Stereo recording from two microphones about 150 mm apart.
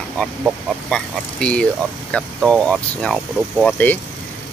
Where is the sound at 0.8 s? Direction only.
5° left (ahead or behind).